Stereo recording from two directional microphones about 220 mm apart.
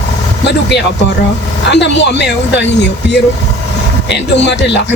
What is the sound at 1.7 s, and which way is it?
Speech, 50° left (ahead or behind).